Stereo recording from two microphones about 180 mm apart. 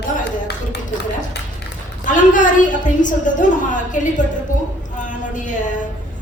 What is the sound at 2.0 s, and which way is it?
A woman's voice, 45° left (ahead or behind).